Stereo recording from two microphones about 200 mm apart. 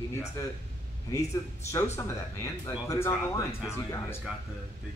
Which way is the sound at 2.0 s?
15° left (ahead or behind).